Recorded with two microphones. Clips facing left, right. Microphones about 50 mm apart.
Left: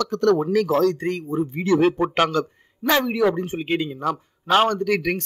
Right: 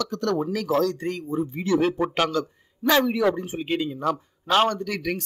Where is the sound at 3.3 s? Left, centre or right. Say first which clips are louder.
Left 3 dB; left.